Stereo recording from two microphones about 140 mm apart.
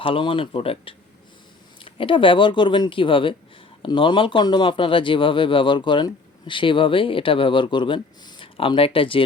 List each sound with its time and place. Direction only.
0.0 s speech: 40° left (ahead or behind)